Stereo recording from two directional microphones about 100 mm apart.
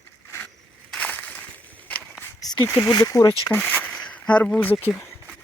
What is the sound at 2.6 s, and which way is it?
Speech, 20° left (ahead or behind).